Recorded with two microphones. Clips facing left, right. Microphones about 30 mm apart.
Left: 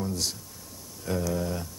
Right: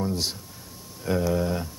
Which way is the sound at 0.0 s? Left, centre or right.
Right.